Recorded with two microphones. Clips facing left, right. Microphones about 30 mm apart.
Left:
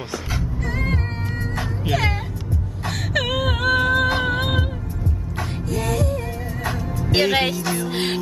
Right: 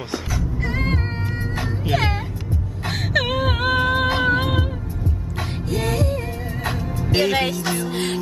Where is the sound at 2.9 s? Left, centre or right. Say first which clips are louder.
Right 2 dB; centre.